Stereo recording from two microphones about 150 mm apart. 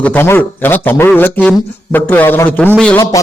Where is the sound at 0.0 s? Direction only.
10° left (ahead or behind).